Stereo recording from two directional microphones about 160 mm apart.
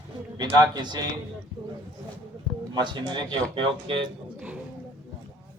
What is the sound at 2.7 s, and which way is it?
Speech, 30° right (ahead or behind).